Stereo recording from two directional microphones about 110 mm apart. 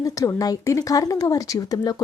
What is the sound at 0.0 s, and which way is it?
Speech, 30° left (ahead or behind).